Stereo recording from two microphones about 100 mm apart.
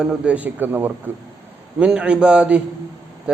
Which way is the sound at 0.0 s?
10° right (ahead or behind).